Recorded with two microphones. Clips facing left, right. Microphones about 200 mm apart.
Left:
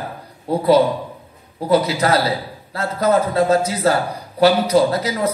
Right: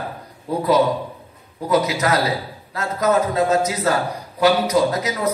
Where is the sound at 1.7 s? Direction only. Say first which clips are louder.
Left 2 dB; 30° left (ahead or behind).